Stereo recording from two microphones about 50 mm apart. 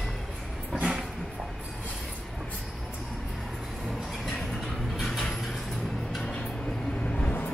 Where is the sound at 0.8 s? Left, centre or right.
Centre.